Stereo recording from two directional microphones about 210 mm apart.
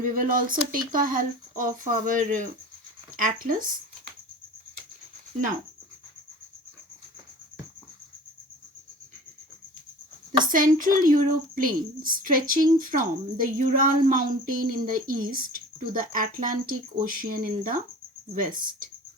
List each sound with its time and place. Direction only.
0.0 s speech: 40° right (ahead or behind)
10.5 s speech: 40° right (ahead or behind)